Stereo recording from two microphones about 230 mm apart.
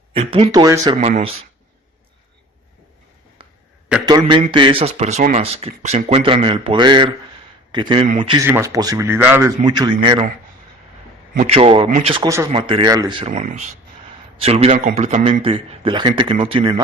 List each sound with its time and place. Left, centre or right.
0.1 s speech: right
1.0 s speech: right
4.0 s speech: centre
8.4 s speech: centre
11.4 s speech: right